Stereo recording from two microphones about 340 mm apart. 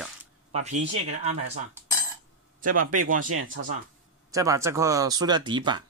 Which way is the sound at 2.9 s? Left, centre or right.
Right.